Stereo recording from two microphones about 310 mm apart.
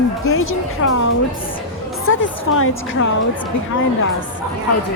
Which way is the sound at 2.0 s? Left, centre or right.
Left.